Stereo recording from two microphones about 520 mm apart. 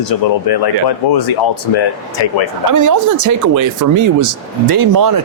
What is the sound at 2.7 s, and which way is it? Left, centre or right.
Speech, right.